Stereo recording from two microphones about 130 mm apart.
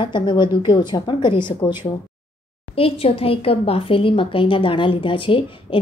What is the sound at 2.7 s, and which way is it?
A woman's voice, 50° left (ahead or behind).